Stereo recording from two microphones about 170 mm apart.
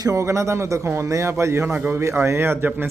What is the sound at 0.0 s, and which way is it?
Speech, 20° right (ahead or behind).